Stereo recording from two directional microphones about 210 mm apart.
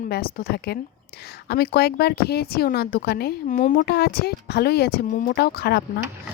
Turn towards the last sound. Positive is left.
turn(degrees=50)  # may be behind; listen again after turning